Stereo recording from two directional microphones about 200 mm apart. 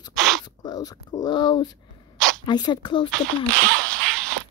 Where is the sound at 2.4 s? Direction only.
20° left (ahead or behind).